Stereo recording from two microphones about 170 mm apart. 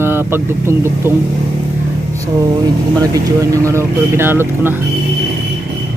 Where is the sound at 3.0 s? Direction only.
20° right (ahead or behind).